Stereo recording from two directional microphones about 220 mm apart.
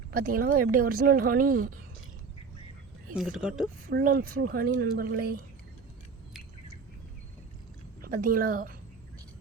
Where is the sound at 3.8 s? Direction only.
40° right (ahead or behind).